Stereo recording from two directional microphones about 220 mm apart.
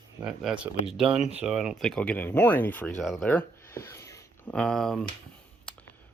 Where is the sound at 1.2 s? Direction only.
30° right (ahead or behind).